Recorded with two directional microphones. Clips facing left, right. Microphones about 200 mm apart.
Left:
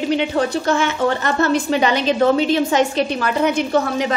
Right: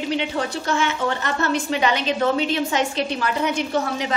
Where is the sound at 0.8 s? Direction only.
40° left (ahead or behind).